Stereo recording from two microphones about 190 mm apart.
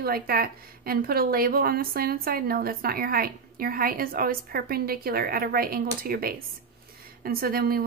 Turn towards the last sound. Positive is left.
turn(degrees=-50)  # may be behind; listen again after turning